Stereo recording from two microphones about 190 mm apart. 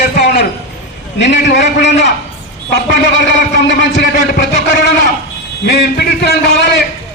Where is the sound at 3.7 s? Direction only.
70° left (ahead or behind).